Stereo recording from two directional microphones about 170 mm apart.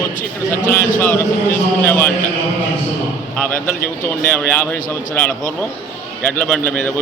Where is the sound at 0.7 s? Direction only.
15° left (ahead or behind).